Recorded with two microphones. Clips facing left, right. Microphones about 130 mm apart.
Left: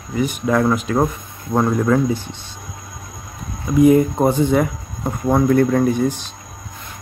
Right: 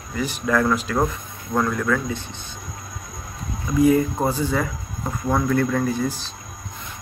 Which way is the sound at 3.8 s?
20° left (ahead or behind).